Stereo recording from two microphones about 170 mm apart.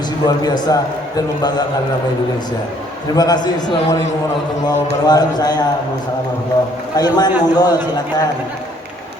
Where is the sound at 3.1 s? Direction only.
25° left (ahead or behind).